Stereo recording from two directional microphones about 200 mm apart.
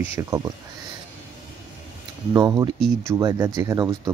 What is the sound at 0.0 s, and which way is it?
Speech, 15° right (ahead or behind).